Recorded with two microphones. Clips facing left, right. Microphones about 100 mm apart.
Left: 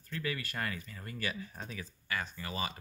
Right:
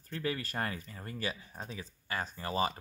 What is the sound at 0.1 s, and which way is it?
Speech, 30° right (ahead or behind).